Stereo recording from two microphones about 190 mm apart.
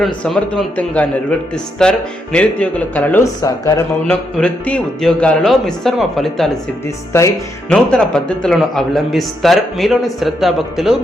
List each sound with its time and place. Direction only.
0.0 s speech: 5° left (ahead or behind)
4.0 s a man's voice: 5° left (ahead or behind)
6.8 s speech: 15° left (ahead or behind)
7.7 s a man's voice: 5° left (ahead or behind)